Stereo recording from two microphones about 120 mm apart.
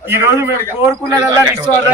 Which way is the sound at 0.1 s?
20° right (ahead or behind).